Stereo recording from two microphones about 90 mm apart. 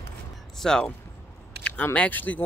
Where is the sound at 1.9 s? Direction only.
20° left (ahead or behind).